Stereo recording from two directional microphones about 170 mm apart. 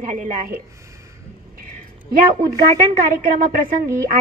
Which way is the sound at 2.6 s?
60° right (ahead or behind).